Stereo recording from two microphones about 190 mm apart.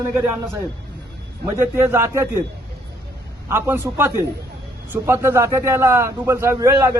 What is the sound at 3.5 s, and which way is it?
A man's voice, 10° right (ahead or behind).